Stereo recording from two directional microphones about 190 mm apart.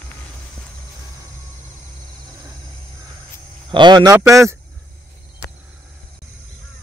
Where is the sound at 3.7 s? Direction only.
25° right (ahead or behind).